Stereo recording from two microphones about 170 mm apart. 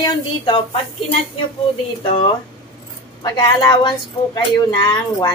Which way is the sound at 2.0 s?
30° left (ahead or behind).